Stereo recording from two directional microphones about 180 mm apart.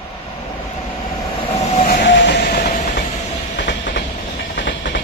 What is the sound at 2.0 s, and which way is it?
Train, 70° left (ahead or behind).